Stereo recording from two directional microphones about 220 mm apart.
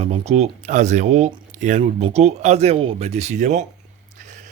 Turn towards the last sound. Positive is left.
turn(degrees=-30)  # may be behind; listen again after turning